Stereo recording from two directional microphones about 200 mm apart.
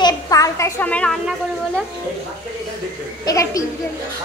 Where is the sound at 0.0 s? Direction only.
15° left (ahead or behind).